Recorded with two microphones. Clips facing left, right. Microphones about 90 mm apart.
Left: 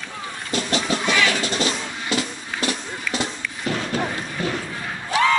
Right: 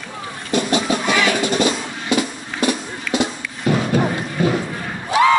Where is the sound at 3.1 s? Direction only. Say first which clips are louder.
Right 8 dB; 20° right (ahead or behind).